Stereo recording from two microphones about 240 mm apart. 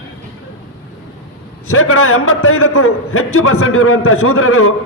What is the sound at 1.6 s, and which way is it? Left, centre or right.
A man's voice, left.